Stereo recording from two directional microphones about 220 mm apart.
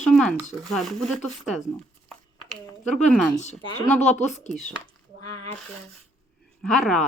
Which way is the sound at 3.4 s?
20° left (ahead or behind).